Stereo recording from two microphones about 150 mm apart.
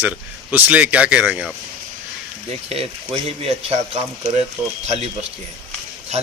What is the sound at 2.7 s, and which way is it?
Speech, 40° right (ahead or behind).